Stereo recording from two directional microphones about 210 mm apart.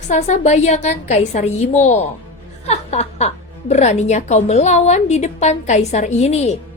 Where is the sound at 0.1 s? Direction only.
35° left (ahead or behind).